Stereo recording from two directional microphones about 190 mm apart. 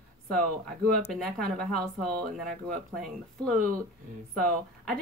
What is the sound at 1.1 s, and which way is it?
Speech, centre (ahead or behind).